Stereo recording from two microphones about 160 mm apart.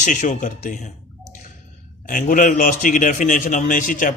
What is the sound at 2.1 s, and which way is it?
A man's voice, 55° left (ahead or behind).